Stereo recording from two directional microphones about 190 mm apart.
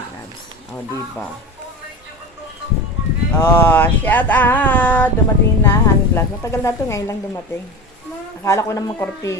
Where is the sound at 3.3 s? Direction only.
10° left (ahead or behind).